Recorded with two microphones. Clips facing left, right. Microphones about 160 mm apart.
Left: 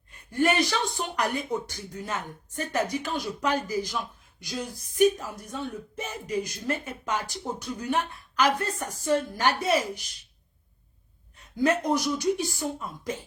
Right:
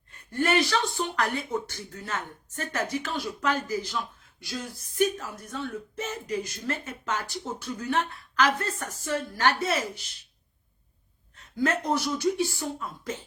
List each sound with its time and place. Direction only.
0.3 s speech: 15° left (ahead or behind)
11.3 s speech: 15° left (ahead or behind)